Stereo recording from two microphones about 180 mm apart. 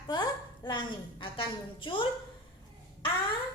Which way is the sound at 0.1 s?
25° left (ahead or behind).